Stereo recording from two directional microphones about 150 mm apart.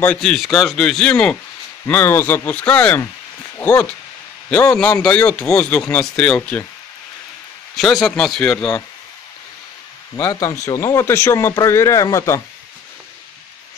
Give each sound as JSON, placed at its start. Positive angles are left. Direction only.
{"t": 0.0, "sound": "a man's voice", "side_deg": 5}
{"t": 7.7, "sound": "a man's voice", "side_deg": 0}
{"t": 10.1, "sound": "a man's voice", "side_deg": 25}